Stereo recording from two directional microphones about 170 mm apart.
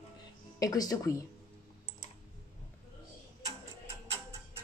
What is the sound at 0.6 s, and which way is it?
Speech, 20° left (ahead or behind).